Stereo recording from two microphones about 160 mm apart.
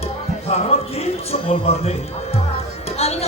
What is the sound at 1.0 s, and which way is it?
Music, 40° left (ahead or behind).